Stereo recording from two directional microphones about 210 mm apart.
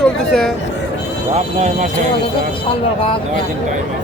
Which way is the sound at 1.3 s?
35° right (ahead or behind).